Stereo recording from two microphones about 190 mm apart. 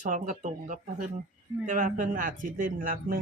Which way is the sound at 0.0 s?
40° right (ahead or behind).